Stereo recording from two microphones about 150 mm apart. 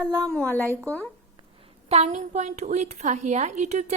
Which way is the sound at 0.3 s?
10° left (ahead or behind).